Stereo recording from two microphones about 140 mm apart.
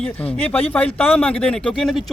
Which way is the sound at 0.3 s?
10° left (ahead or behind).